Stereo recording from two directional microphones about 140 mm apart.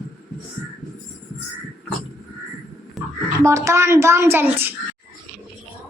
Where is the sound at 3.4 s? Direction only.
20° right (ahead or behind).